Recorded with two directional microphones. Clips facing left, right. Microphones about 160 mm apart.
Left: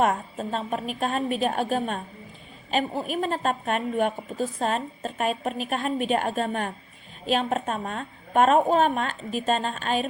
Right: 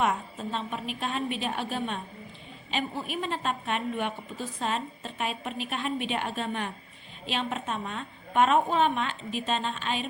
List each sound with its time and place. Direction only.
0.0 s a woman's voice: 45° left (ahead or behind)